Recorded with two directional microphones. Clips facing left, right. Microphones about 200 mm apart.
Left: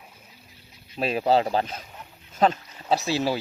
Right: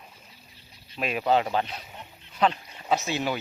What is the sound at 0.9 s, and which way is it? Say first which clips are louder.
Speech: left 3 dB; 35° left (ahead or behind).